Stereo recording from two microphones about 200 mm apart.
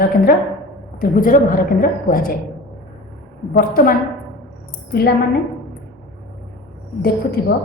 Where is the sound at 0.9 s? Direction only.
45° left (ahead or behind).